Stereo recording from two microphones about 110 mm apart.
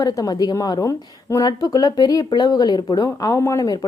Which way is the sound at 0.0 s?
35° left (ahead or behind).